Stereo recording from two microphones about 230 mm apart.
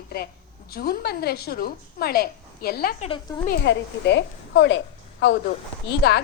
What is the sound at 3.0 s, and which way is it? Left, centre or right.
Speech, left.